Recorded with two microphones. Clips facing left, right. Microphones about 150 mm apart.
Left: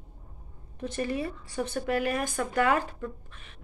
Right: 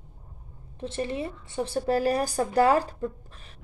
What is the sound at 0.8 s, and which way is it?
A woman's voice, 25° right (ahead or behind).